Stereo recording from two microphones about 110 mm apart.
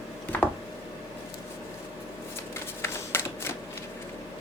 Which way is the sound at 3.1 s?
20° left (ahead or behind).